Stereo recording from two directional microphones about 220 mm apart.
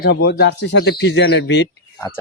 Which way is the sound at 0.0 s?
50° left (ahead or behind).